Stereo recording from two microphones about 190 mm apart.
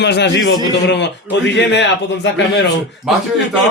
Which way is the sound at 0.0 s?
65° left (ahead or behind).